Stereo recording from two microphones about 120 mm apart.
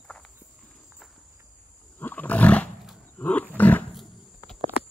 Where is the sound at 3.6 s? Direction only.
15° left (ahead or behind).